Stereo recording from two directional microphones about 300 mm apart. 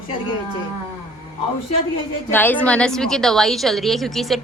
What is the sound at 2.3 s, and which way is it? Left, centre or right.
A woman's voice, centre.